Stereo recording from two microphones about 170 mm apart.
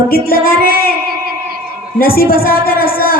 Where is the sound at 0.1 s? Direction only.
60° left (ahead or behind).